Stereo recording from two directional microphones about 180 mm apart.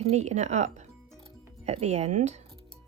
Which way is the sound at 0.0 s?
40° right (ahead or behind).